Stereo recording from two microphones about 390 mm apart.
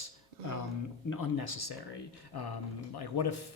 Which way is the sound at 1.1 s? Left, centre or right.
Left.